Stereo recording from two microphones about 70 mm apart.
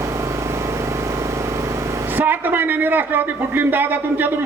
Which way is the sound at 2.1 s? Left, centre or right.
Right.